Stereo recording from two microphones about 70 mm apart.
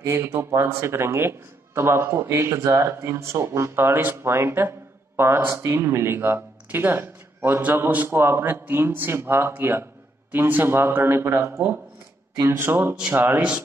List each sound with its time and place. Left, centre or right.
0.0 s speech: right